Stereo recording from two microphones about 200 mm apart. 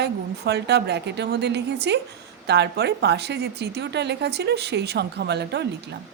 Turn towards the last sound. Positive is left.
turn(degrees=-60)  # may be behind; listen again after turning